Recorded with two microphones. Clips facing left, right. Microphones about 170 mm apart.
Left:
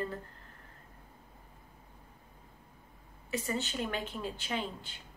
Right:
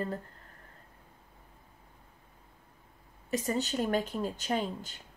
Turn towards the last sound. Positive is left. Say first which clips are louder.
# right 5 dB
turn(degrees=-45)  # may be behind; listen again after turning